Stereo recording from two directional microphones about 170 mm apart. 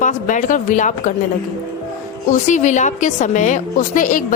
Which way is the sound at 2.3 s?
45° left (ahead or behind).